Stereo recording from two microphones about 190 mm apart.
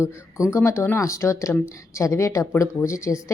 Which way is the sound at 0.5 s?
15° left (ahead or behind).